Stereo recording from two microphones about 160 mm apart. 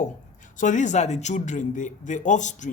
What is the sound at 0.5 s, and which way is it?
Speech, 50° left (ahead or behind).